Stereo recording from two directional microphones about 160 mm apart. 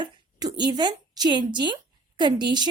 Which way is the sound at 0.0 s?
25° right (ahead or behind).